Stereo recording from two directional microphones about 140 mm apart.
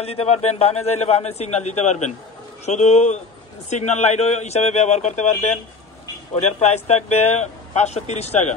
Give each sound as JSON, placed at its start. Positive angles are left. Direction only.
{"t": 0.0, "sound": "speech", "side_deg": 45}
{"t": 6.6, "sound": "speech", "side_deg": 55}